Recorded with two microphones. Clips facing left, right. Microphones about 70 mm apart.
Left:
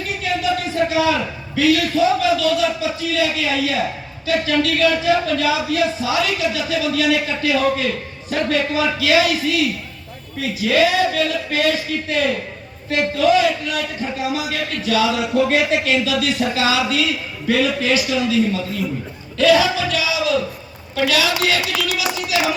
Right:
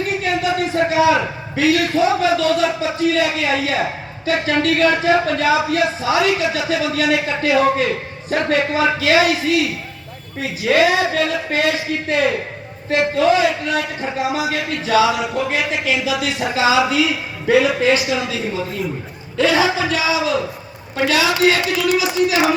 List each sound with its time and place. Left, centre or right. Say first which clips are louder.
0.0 s a man's voice: right 2 dB; right
15.2 s speech: left 3 dB; centre
16.0 s a man's voice: left 1 dB; centre